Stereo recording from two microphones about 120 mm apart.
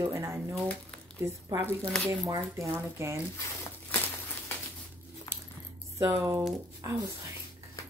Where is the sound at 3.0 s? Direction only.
20° right (ahead or behind).